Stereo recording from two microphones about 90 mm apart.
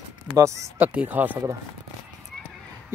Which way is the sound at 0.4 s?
35° right (ahead or behind).